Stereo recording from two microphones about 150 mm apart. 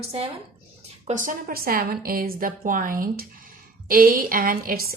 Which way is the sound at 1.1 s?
60° right (ahead or behind).